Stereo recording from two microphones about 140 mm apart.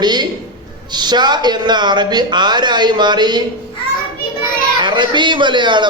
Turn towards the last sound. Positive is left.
turn(degrees=-35)  # may be behind; listen again after turning